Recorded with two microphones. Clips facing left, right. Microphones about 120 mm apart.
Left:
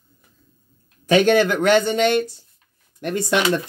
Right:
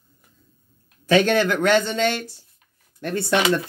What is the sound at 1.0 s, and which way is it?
Speech, 15° left (ahead or behind).